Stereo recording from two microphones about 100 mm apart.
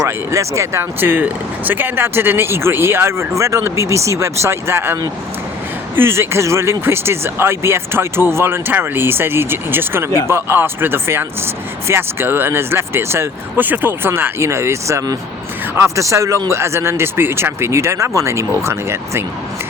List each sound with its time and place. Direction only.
0.0 s speech: 30° right (ahead or behind)
6.0 s speech: 25° right (ahead or behind)